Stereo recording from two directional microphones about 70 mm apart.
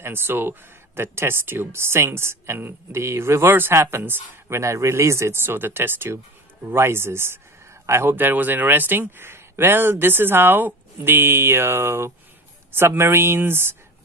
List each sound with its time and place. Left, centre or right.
0.0 s speech: right
4.6 s speech: right